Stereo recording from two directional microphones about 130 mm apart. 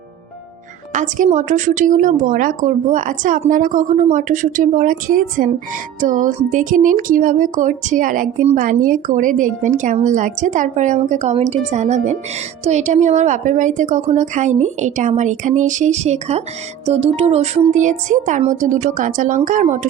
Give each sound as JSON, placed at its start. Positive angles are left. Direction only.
{"t": 0.9, "sound": "a woman's voice", "side_deg": -75}